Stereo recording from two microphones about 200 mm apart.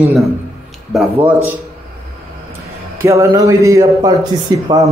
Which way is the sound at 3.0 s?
15° right (ahead or behind).